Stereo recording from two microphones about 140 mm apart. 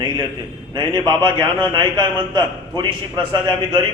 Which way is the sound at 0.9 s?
35° right (ahead or behind).